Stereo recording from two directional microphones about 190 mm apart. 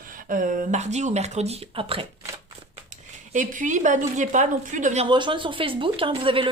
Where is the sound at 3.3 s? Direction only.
40° right (ahead or behind).